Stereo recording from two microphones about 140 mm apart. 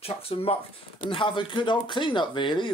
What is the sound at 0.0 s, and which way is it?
Speech, 45° left (ahead or behind).